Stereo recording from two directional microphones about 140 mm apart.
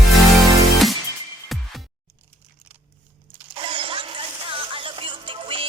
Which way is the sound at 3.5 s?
40° right (ahead or behind).